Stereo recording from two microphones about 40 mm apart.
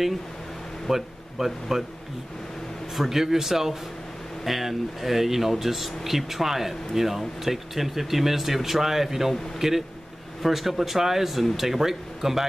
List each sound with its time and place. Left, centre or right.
0.8 s speech: centre
3.0 s speech: centre